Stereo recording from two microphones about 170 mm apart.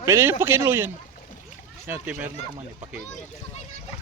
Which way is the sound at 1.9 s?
10° right (ahead or behind).